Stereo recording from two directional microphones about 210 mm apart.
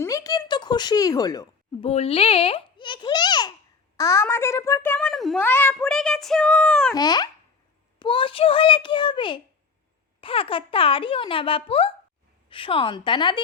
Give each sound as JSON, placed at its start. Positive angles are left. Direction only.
{"t": 0.0, "sound": "a sound", "side_deg": 15}
{"t": 1.9, "sound": "a child's voice", "side_deg": 30}
{"t": 6.9, "sound": "a child's voice", "side_deg": 20}